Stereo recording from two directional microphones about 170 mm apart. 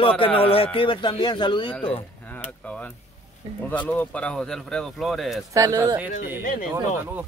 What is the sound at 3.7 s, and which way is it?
Speech, 10° left (ahead or behind).